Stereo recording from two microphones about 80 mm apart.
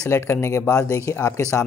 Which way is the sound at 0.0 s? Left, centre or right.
Left.